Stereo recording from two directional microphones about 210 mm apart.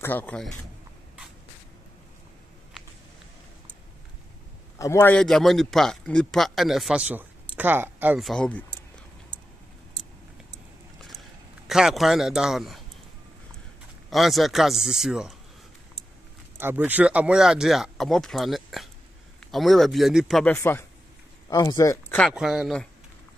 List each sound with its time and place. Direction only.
0.0 s speech: 10° left (ahead or behind)
4.7 s a man's voice: 15° left (ahead or behind)
11.1 s a sound: centre (ahead or behind)
14.1 s a man's voice: centre (ahead or behind)
16.5 s a man's voice: 10° right (ahead or behind); by 22.2 s 15° left (ahead or behind)
22.2 s a man's voice: centre (ahead or behind)